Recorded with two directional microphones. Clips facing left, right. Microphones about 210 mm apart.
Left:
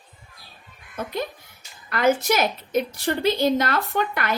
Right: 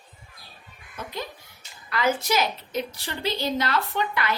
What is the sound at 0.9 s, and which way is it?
A child's voice, 50° left (ahead or behind).